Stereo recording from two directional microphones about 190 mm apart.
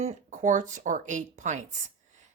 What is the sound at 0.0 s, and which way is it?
Speech, 40° right (ahead or behind).